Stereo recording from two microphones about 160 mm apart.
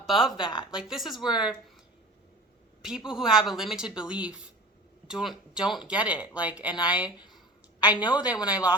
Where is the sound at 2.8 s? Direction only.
5° right (ahead or behind).